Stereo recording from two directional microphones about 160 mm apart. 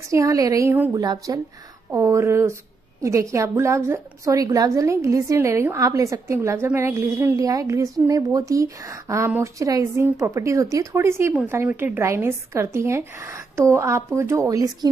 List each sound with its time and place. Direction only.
0.1 s a woman's voice: 20° right (ahead or behind)